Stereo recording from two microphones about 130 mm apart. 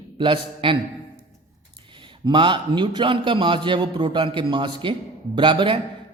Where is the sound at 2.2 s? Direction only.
35° right (ahead or behind).